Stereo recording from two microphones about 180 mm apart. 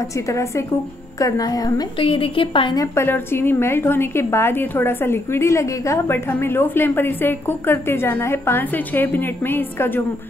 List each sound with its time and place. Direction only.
0.3 s a woman's voice: 15° left (ahead or behind)